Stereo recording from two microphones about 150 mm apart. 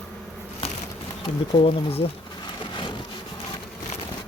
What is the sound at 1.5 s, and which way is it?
Speech, 40° left (ahead or behind).